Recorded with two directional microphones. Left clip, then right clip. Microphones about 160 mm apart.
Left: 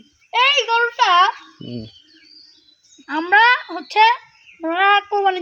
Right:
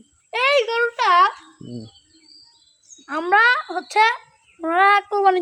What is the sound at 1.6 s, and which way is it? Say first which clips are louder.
Bird: left 6 dB; 15° left (ahead or behind).